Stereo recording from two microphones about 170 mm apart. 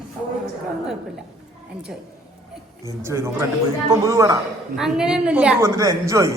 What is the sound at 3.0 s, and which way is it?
A man's voice, 15° right (ahead or behind).